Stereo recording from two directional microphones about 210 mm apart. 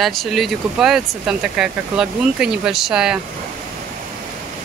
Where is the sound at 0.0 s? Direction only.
Centre (ahead or behind).